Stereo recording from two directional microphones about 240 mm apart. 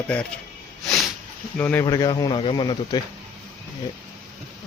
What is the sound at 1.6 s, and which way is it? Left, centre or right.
Speech, centre.